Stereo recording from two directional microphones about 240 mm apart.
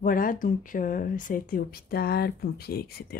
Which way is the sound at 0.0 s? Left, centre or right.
Left.